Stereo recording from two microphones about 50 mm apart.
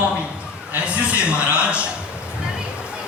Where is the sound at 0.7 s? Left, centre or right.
Right.